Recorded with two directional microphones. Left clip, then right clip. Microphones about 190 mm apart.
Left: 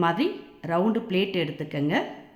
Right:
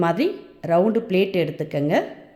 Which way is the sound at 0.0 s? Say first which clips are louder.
Right 3 dB; 20° right (ahead or behind).